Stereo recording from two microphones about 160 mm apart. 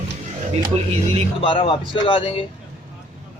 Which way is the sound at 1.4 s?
30° left (ahead or behind).